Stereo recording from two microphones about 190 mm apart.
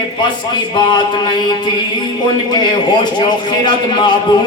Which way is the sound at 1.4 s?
20° left (ahead or behind).